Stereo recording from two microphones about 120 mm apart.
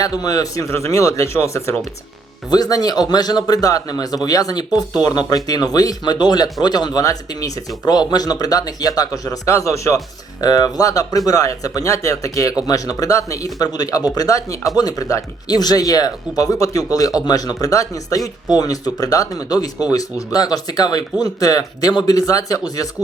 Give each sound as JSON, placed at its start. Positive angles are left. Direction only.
{"t": 0.0, "sound": "a man's voice", "side_deg": 30}